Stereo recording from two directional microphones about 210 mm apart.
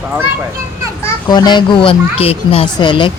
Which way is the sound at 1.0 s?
20° left (ahead or behind).